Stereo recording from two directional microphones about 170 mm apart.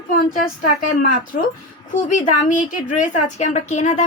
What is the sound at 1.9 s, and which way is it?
A woman's voice, 50° left (ahead or behind).